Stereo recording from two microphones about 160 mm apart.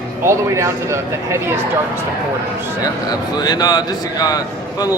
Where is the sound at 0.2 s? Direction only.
15° right (ahead or behind).